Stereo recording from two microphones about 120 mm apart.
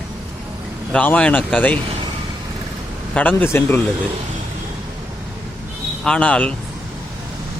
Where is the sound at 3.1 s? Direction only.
15° left (ahead or behind).